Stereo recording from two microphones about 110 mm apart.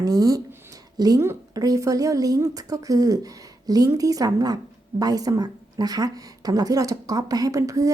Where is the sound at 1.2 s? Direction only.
20° right (ahead or behind).